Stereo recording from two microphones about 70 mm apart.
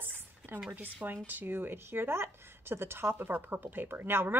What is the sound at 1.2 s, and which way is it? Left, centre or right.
Speech, right.